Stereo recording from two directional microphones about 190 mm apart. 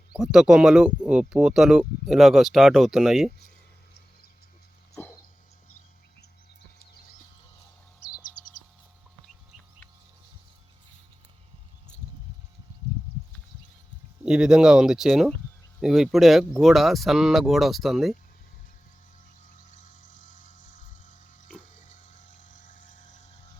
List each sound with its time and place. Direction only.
0.2 s speech: 5° right (ahead or behind)
5.0 s dog: 10° left (ahead or behind)
14.3 s speech: 5° right (ahead or behind)
19.5 s vehicle: 40° left (ahead or behind)